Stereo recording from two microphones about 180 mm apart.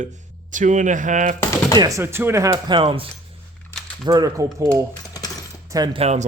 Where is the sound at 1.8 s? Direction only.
15° right (ahead or behind).